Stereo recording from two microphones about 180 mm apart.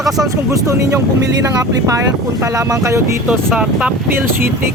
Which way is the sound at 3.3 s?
5° right (ahead or behind).